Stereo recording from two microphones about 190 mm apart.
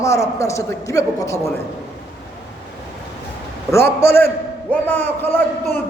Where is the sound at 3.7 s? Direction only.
15° left (ahead or behind).